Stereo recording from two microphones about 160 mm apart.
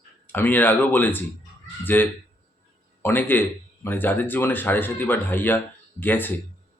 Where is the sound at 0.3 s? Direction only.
10° left (ahead or behind).